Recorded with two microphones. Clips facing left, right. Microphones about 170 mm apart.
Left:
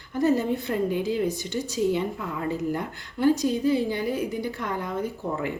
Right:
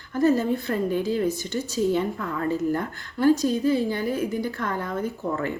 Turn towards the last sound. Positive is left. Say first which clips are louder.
# right 1 dB
turn(degrees=15)  # may be behind; listen again after turning